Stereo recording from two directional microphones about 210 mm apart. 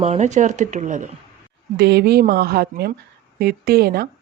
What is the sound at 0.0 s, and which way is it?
Speech, 35° right (ahead or behind).